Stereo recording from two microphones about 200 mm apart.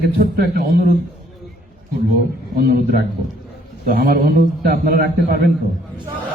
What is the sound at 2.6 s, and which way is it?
A man's voice, 50° right (ahead or behind).